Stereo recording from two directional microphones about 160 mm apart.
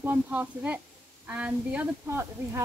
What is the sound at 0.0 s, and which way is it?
Speech, 10° right (ahead or behind).